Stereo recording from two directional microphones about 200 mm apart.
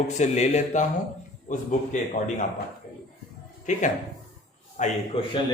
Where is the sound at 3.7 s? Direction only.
40° left (ahead or behind).